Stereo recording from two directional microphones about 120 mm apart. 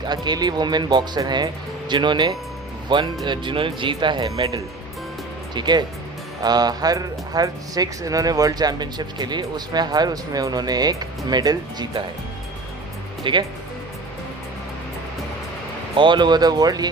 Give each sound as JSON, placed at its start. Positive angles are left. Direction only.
{"t": 0.0, "sound": "speech", "side_deg": -35}
{"t": 13.2, "sound": "speech", "side_deg": -45}
{"t": 16.0, "sound": "speech", "side_deg": -40}